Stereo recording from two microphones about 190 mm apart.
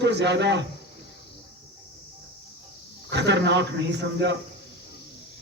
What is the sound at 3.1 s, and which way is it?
A man's voice, 65° right (ahead or behind).